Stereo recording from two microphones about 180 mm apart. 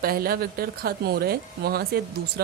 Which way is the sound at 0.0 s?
55° right (ahead or behind).